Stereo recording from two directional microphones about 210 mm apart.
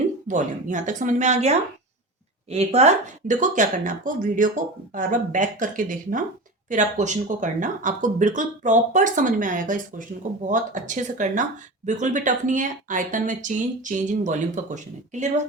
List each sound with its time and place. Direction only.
0.3 s speech: 35° right (ahead or behind)